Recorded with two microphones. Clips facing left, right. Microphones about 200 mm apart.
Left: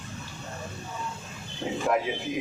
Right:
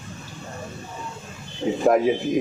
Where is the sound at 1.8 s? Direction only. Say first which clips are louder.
Right 9 dB; 45° right (ahead or behind).